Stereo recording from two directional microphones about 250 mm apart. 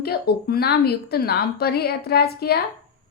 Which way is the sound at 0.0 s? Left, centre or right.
Left.